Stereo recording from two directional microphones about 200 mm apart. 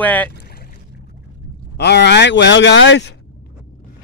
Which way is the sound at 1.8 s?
55° left (ahead or behind).